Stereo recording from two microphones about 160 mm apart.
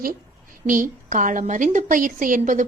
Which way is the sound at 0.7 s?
55° right (ahead or behind).